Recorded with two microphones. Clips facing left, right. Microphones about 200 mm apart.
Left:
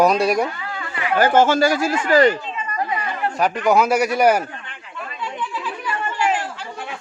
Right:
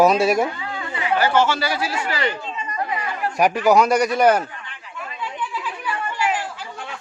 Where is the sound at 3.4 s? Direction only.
10° right (ahead or behind).